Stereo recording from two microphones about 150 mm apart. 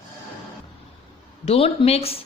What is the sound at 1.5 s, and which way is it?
Speech, 40° left (ahead or behind).